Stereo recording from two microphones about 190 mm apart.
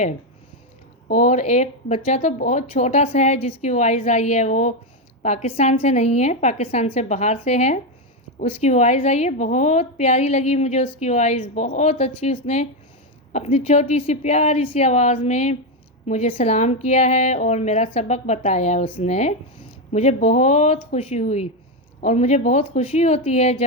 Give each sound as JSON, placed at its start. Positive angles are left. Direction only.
{"t": 1.0, "sound": "a woman's voice", "side_deg": 40}